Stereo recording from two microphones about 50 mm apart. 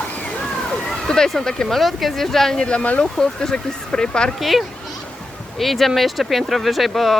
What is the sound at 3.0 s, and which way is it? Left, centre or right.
Speech, centre.